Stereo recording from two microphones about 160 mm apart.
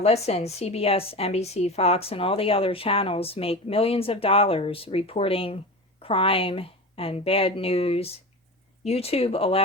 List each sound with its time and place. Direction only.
0.0 s a woman's voice: 40° left (ahead or behind)